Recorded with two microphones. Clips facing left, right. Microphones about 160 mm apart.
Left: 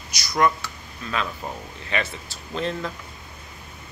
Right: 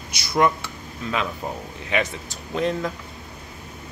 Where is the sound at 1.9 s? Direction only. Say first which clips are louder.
Right 3 dB; 15° right (ahead or behind).